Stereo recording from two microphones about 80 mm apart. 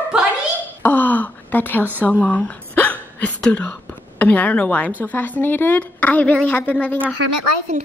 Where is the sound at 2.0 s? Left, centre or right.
Centre.